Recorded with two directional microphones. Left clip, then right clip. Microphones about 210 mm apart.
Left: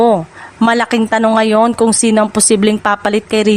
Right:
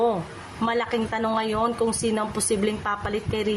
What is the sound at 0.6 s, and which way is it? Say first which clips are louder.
A woman's voice: left 12 dB; 55° left (ahead or behind).